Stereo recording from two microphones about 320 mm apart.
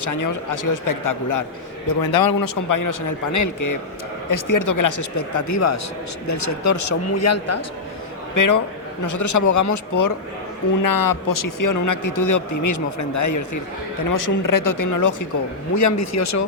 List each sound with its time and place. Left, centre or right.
0.0 s a man's voice: left
1.9 s a man's voice: left
8.4 s a man's voice: left
10.8 s a man's voice: left
14.1 s a man's voice: left